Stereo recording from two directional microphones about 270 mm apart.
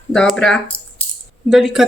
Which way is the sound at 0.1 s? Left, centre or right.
Centre.